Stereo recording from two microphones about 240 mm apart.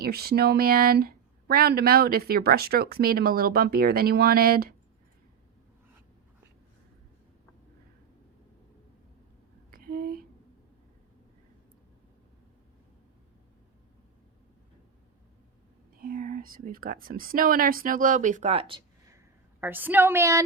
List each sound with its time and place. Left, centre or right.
0.0 s speech: right
9.7 s a sound: right
16.0 s speech: right
19.1 s a woman's voice: centre